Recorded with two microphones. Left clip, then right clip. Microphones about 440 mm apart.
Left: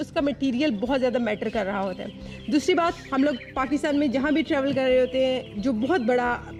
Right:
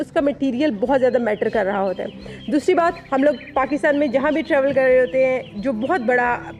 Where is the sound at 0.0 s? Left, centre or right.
Right.